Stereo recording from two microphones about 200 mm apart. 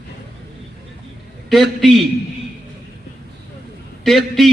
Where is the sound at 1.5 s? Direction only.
Centre (ahead or behind).